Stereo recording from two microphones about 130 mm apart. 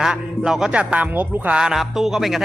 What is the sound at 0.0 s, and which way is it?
Speech, 5° right (ahead or behind).